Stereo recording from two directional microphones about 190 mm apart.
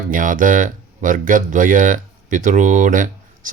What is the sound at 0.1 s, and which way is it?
Speech, 45° right (ahead or behind).